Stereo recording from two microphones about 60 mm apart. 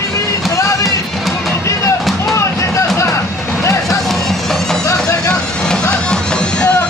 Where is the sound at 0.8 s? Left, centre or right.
Centre.